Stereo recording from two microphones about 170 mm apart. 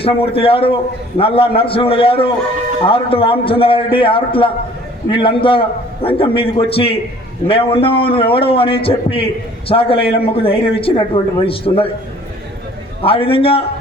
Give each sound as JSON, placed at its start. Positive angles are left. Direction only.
{"t": 0.0, "sound": "a man's voice", "side_deg": 35}
{"t": 13.0, "sound": "a man's voice", "side_deg": 35}